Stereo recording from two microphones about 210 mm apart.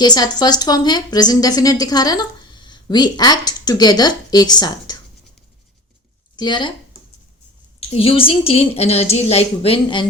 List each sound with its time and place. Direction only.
0.0 s speech: 20° left (ahead or behind)
6.3 s speech: 20° left (ahead or behind)
7.8 s speech: 30° left (ahead or behind)